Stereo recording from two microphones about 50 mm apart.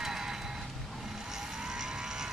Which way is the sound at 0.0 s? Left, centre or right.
Centre.